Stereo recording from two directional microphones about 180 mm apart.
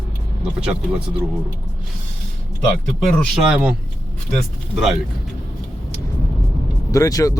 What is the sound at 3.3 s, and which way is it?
Speech, 5° right (ahead or behind).